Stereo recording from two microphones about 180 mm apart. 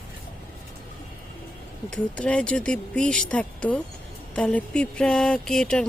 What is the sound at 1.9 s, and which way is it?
Speech, 5° left (ahead or behind).